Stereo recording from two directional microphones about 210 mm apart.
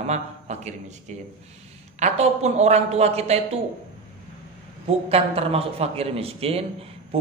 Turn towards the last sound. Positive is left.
turn(degrees=-30)  # may be behind; listen again after turning